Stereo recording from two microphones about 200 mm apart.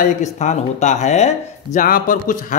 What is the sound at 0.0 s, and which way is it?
Speech, 35° left (ahead or behind).